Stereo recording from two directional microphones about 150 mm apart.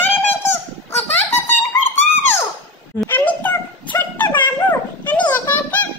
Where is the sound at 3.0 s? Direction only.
10° left (ahead or behind).